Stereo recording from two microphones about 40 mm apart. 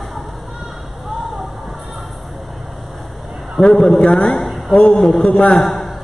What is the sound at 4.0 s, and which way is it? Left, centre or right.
Speech, left.